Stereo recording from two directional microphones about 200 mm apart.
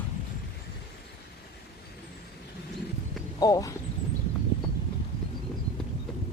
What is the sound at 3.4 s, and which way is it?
Speech, 20° left (ahead or behind).